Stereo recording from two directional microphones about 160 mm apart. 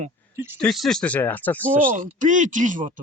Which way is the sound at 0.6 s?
Centre (ahead or behind).